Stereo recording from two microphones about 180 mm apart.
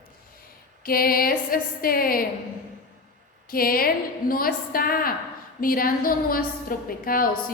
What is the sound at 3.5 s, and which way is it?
A woman's voice, 55° left (ahead or behind).